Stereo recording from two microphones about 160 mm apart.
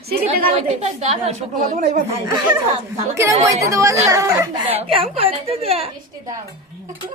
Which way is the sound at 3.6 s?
20° right (ahead or behind).